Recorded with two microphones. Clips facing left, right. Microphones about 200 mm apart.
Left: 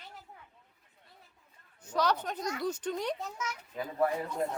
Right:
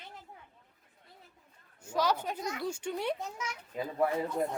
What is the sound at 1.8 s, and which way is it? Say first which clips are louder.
A child's voice: even; 5° right (ahead or behind).